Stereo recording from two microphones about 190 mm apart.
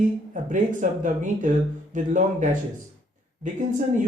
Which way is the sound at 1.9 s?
40° right (ahead or behind).